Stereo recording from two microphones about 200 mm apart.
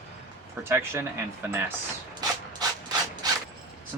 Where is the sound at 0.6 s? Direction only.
10° right (ahead or behind).